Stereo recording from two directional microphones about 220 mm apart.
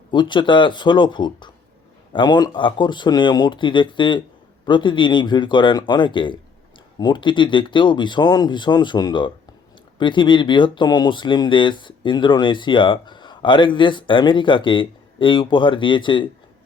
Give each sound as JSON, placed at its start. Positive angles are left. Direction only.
{"t": 0.1, "sound": "speech", "side_deg": 20}